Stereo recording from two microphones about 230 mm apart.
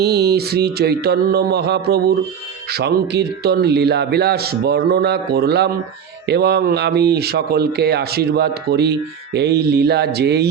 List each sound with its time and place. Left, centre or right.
0.0 s speech: right